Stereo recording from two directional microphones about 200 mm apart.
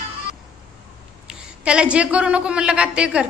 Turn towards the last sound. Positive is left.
turn(degrees=-5)  # may be behind; listen again after turning